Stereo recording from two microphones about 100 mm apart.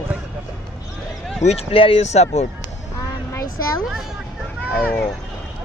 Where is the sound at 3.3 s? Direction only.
30° left (ahead or behind).